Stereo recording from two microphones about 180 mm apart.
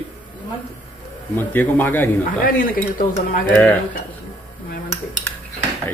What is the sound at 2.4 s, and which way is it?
Speech, 50° left (ahead or behind).